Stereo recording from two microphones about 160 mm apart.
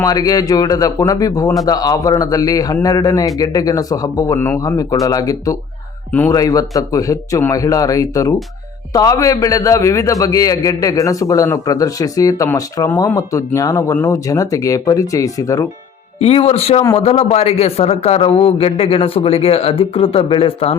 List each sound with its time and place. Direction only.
0.0 s a man's voice: 25° left (ahead or behind)
16.2 s a man's voice: 40° left (ahead or behind)